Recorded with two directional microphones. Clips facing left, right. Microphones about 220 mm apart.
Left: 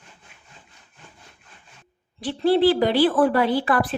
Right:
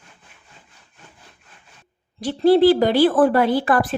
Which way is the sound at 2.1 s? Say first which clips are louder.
Right 4 dB; 40° right (ahead or behind).